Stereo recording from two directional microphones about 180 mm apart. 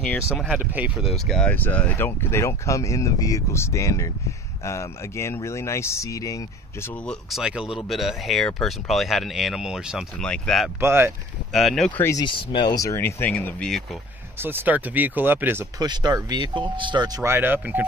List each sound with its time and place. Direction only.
0.4 s speech: 10° right (ahead or behind); by 6.9 s 20° left (ahead or behind)
7.1 s speech: centre (ahead or behind)
10.8 s speech: 15° right (ahead or behind)
11.5 s speech: centre (ahead or behind)
12.0 s speech: 20° left (ahead or behind); by 13.8 s 5° left (ahead or behind)
14.4 s speech: 10° right (ahead or behind)
15.8 s speech: 20° right (ahead or behind)